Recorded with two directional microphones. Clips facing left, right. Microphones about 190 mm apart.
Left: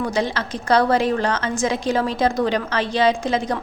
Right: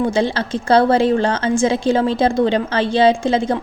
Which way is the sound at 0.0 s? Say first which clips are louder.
Right 5 dB; 30° right (ahead or behind).